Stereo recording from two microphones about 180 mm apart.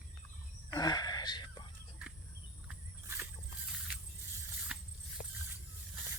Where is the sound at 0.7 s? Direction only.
20° left (ahead or behind).